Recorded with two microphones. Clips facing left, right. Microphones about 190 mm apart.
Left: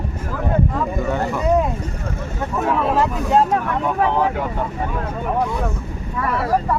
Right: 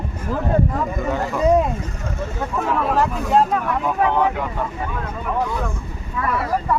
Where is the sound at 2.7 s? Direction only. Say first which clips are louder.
Even; centre (ahead or behind).